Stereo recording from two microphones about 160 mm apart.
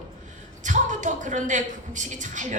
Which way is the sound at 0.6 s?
50° right (ahead or behind).